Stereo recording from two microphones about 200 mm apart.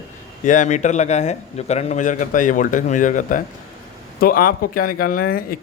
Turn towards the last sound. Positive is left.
turn(degrees=45)  # may be behind; listen again after turning